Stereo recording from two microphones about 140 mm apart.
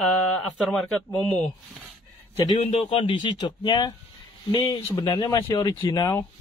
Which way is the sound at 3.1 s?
35° left (ahead or behind).